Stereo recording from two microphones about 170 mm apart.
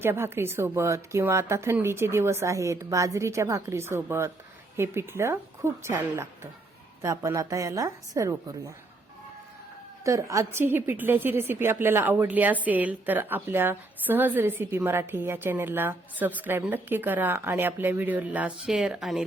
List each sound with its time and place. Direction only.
0.0 s a woman's voice: 15° right (ahead or behind)
10.0 s a woman's voice: 20° right (ahead or behind); by 19.2 s centre (ahead or behind)